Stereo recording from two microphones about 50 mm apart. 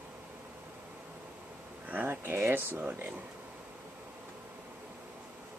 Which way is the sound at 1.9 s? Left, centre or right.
Right.